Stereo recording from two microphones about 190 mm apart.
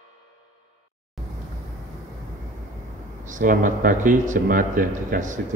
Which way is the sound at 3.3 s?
45° right (ahead or behind).